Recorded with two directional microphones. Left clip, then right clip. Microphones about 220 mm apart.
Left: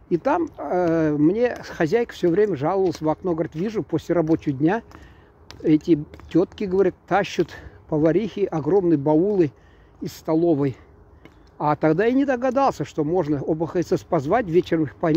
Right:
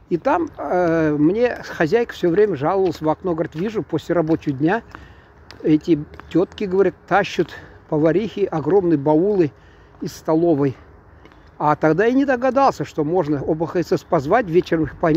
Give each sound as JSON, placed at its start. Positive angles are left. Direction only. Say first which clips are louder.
{"t": 0.1, "sound": "speech", "louder": "right 2 dB", "side_deg": 20}